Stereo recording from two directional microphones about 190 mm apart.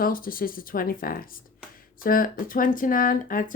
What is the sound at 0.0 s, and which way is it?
Speech, 50° left (ahead or behind).